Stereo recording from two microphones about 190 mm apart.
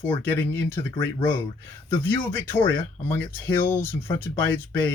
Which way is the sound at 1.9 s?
10° left (ahead or behind).